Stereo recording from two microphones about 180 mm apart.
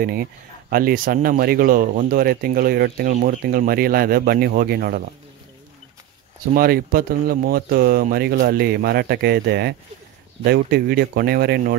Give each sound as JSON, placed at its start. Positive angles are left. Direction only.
{"t": 0.0, "sound": "speech", "side_deg": -55}
{"t": 3.1, "sound": "speech", "side_deg": -45}
{"t": 6.5, "sound": "speech", "side_deg": -55}